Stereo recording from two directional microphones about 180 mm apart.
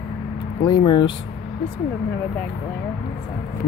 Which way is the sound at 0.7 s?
25° left (ahead or behind).